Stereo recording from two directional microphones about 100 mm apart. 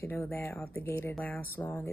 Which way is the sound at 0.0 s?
25° left (ahead or behind).